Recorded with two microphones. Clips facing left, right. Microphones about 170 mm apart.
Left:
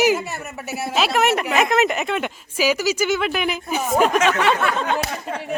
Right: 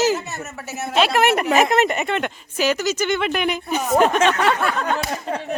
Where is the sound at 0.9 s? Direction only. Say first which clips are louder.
Right 2 dB; centre (ahead or behind).